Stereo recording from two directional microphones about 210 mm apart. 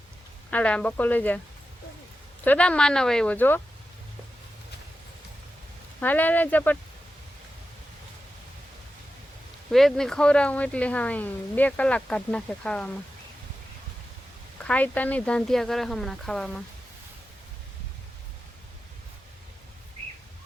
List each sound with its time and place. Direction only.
0.5 s speech: 5° left (ahead or behind)
2.4 s speech: 5° left (ahead or behind)
6.0 s speech: 10° left (ahead or behind)
9.7 s speech: centre (ahead or behind)
14.6 s speech: 5° left (ahead or behind)